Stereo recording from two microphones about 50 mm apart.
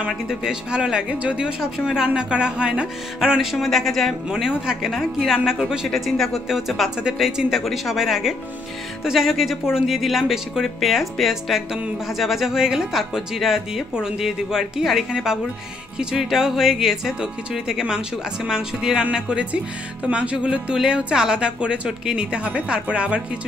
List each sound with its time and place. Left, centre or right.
0.3 s a woman's voice: centre
3.5 s speech: centre
4.3 s speech: centre
5.9 s speech: centre
7.2 s a woman's voice: centre